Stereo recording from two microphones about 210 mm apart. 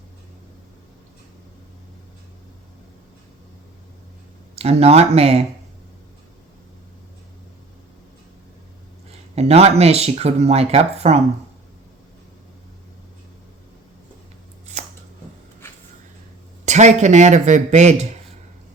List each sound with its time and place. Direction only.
4.5 s speech: 30° right (ahead or behind)
9.3 s speech: 30° right (ahead or behind)
16.6 s speech: 35° right (ahead or behind)